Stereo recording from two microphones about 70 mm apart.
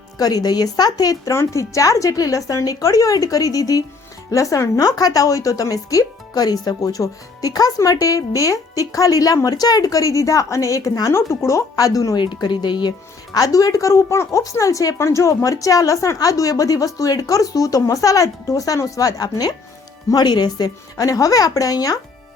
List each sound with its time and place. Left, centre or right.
0.2 s speech: left
1.3 s a woman's voice: left
12.1 s speech: left
13.3 s a woman's voice: left
20.1 s speech: left
20.9 s a woman's voice: left